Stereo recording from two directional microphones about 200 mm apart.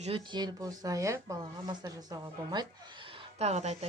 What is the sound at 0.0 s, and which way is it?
A woman's voice, 25° right (ahead or behind).